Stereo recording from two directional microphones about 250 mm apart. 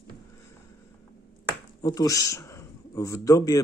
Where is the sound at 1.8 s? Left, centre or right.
Centre.